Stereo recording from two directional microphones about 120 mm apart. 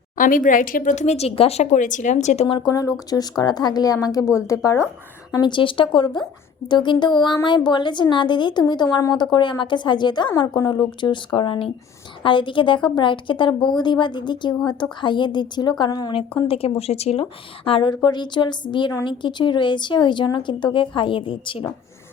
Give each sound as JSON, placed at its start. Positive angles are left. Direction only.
{"t": 0.4, "sound": "a woman's voice", "side_deg": 90}
{"t": 2.5, "sound": "a woman's voice", "side_deg": 40}
{"t": 5.3, "sound": "a woman's voice", "side_deg": 40}
{"t": 16.1, "sound": "speech", "side_deg": 50}
{"t": 17.7, "sound": "a woman's voice", "side_deg": 45}